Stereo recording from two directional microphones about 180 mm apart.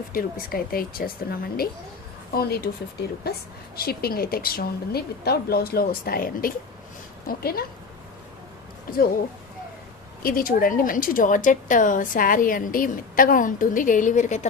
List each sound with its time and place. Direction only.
0.1 s a woman's voice: 50° left (ahead or behind)
10.2 s a woman's voice: 50° left (ahead or behind)